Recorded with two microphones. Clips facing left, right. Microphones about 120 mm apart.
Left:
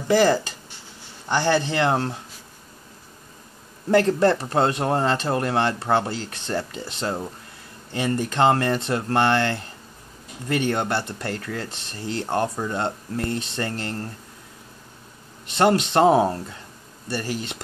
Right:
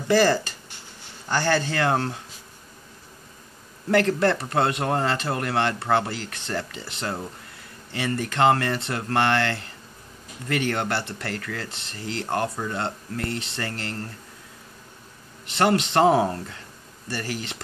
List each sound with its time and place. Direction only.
0.1 s speech: 15° left (ahead or behind)
3.9 s speech: 30° left (ahead or behind)
15.7 s speech: 25° left (ahead or behind)